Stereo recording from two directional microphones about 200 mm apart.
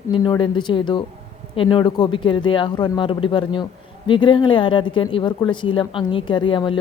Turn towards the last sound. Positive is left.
turn(degrees=25)  # may be behind; listen again after turning